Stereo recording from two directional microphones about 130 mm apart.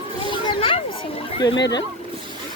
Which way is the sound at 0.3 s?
40° left (ahead or behind).